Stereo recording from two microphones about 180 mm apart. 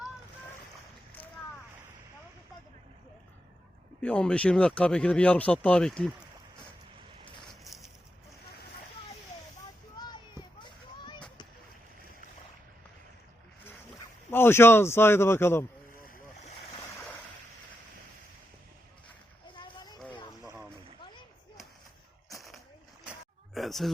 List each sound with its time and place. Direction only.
4.0 s speech: 5° left (ahead or behind)
10.6 s a sound: 25° left (ahead or behind)
14.3 s a man's voice: 10° left (ahead or behind)
15.9 s boat: 50° left (ahead or behind)
19.5 s splash: 25° left (ahead or behind)
23.6 s a sound: centre (ahead or behind)